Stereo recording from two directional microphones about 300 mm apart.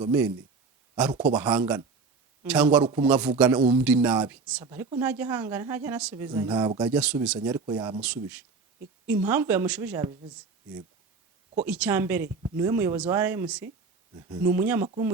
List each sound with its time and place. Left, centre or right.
1.2 s speech: centre
2.8 s speech: centre
3.1 s a woman's voice: centre
7.3 s a woman's voice: centre
8.0 s a woman's voice: centre
11.6 s a woman's voice: centre